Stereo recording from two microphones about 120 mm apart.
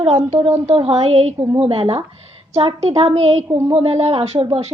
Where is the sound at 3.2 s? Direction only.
65° right (ahead or behind).